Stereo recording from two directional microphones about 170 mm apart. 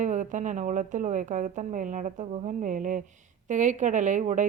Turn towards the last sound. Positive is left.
turn(degrees=-45)  # may be behind; listen again after turning